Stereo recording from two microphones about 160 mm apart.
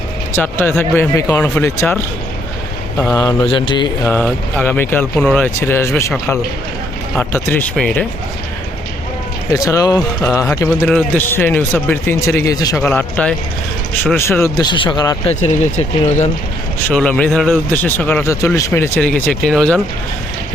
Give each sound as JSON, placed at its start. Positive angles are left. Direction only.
{"t": 0.3, "sound": "speech", "side_deg": 15}
{"t": 3.4, "sound": "mantra", "side_deg": 30}
{"t": 4.0, "sound": "speech", "side_deg": 10}
{"t": 9.5, "sound": "speech", "side_deg": 20}
{"t": 10.8, "sound": "a man's voice", "side_deg": 5}
{"t": 11.3, "sound": "speech", "side_deg": 15}
{"t": 12.8, "sound": "speech", "side_deg": 10}
{"t": 15.3, "sound": "speech", "side_deg": 45}
{"t": 16.9, "sound": "speech", "side_deg": 10}